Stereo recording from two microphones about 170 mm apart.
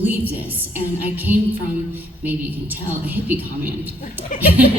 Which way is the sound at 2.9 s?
10° right (ahead or behind).